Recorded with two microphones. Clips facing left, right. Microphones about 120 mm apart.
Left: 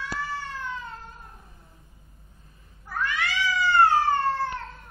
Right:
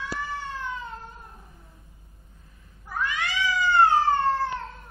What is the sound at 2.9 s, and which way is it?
Cat, 15° right (ahead or behind).